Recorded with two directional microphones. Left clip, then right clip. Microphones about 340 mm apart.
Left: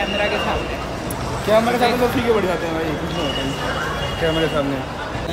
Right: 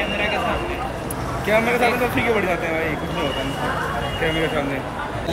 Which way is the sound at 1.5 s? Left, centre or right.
Centre.